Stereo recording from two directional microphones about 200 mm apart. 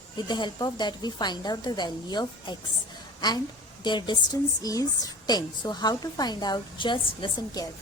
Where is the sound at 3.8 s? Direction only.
20° left (ahead or behind).